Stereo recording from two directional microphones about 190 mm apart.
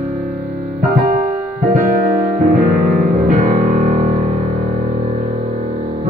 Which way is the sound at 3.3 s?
40° right (ahead or behind).